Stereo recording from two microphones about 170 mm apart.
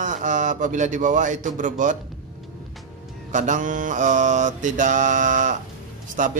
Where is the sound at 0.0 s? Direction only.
50° right (ahead or behind).